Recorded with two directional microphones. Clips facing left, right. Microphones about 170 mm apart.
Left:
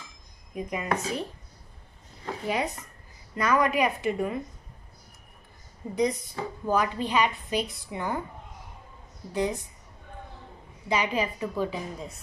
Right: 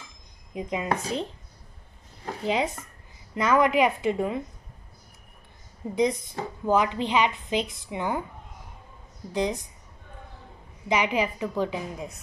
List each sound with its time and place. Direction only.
0.6 s a woman's voice: 20° right (ahead or behind)
2.4 s a woman's voice: 25° right (ahead or behind)
5.8 s a woman's voice: 15° right (ahead or behind)
9.3 s a woman's voice: 20° right (ahead or behind)
10.9 s a woman's voice: 20° right (ahead or behind)
11.7 s a woman's voice: 5° right (ahead or behind)